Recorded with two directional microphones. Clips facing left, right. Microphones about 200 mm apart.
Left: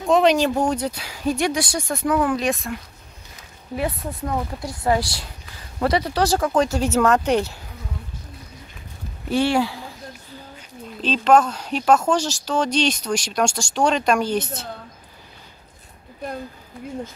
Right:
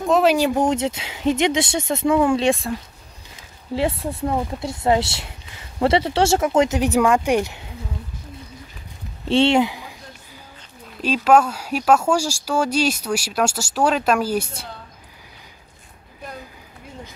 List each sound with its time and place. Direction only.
0.0 s speech: 5° right (ahead or behind); by 2.7 s 30° right (ahead or behind)
3.7 s speech: 30° right (ahead or behind)
9.3 s speech: 25° right (ahead or behind)
11.0 s speech: 10° right (ahead or behind)